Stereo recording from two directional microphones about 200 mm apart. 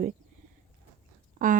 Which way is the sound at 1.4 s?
45° right (ahead or behind).